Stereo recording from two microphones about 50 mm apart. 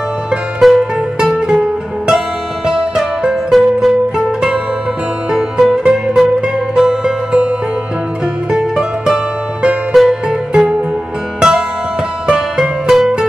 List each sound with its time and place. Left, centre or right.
0.6 s music: centre
1.5 s music: centre
5.3 s music: centre
5.9 s music: centre
8.5 s music: centre